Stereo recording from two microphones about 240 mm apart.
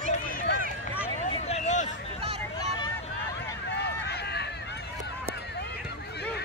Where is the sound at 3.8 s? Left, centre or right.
Left.